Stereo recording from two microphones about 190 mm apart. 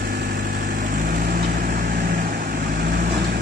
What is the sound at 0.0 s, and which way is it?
Vehicle, 50° right (ahead or behind).